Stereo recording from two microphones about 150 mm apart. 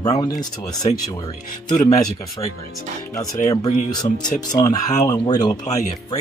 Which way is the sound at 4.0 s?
25° left (ahead or behind).